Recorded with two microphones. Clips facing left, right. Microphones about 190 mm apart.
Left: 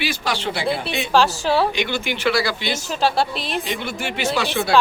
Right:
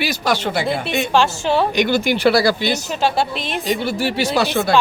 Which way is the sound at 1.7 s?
40° right (ahead or behind).